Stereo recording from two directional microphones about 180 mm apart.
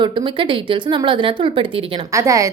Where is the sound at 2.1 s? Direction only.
15° right (ahead or behind).